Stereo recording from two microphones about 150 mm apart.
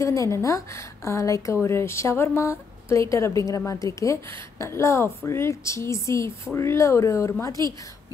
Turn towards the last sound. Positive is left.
turn(degrees=20)  # may be behind; listen again after turning